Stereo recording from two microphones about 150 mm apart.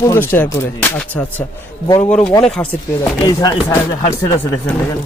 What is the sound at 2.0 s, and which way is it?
Speech, 50° left (ahead or behind).